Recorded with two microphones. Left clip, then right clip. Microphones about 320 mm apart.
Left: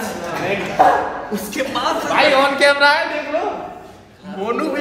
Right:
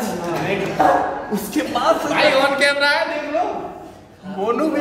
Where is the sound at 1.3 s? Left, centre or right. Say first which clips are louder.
Right 1 dB; centre.